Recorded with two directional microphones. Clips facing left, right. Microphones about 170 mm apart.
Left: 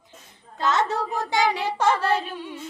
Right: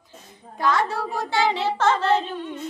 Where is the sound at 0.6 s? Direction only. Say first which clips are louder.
Right 1 dB; 20° left (ahead or behind).